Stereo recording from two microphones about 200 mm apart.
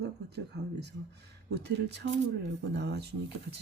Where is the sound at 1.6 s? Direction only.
60° right (ahead or behind).